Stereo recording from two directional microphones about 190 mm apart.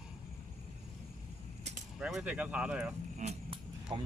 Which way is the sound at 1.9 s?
5° right (ahead or behind).